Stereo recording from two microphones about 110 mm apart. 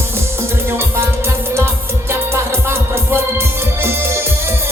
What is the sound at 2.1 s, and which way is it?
Music, 25° right (ahead or behind).